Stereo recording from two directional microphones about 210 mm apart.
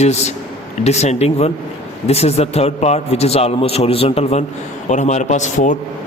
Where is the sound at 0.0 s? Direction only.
30° left (ahead or behind).